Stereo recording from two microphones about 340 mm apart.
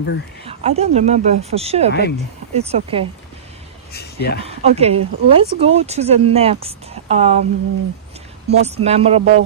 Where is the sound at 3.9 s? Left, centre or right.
Left.